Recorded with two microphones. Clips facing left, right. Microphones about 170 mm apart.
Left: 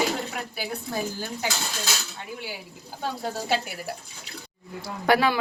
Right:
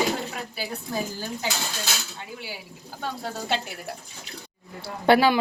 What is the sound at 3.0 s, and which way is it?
Speech, 10° left (ahead or behind).